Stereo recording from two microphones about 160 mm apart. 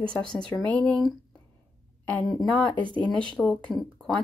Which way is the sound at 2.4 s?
5° left (ahead or behind).